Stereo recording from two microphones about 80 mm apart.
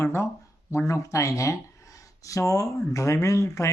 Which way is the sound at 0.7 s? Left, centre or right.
Left.